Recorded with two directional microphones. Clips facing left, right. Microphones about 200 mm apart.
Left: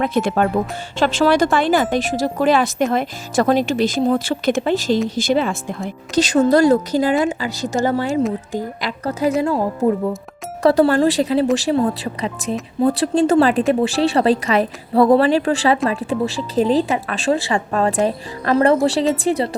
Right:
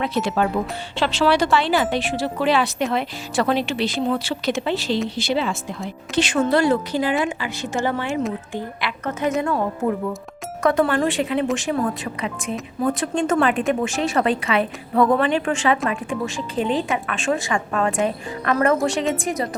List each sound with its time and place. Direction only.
0.0 s speech: 50° left (ahead or behind)
6.1 s speech: 40° left (ahead or behind)